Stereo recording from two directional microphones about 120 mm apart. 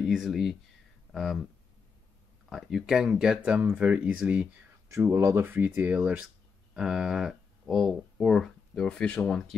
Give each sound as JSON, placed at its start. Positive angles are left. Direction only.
{"t": 0.0, "sound": "speech", "side_deg": 0}
{"t": 2.5, "sound": "speech", "side_deg": -5}
{"t": 4.9, "sound": "speech", "side_deg": -25}